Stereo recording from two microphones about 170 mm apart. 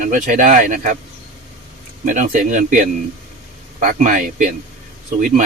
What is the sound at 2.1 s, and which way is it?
Speech, 45° right (ahead or behind).